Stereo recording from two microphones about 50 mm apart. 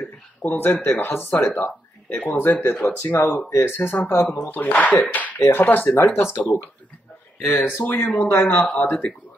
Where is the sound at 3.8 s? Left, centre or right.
Left.